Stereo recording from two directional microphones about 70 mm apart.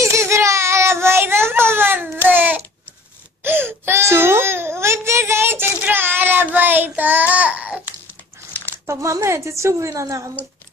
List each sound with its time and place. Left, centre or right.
0.0 s baby cry: right
8.8 s a woman's voice: right